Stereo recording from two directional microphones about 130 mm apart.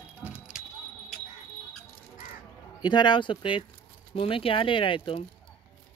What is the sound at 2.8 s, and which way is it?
Speech, 35° left (ahead or behind).